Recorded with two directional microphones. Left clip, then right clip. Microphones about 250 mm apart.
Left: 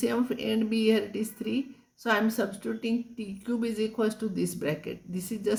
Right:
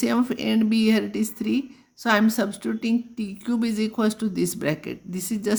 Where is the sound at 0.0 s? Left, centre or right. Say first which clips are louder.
Right 4 dB; right.